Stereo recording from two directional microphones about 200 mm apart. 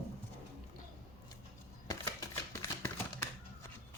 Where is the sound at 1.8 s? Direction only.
15° left (ahead or behind).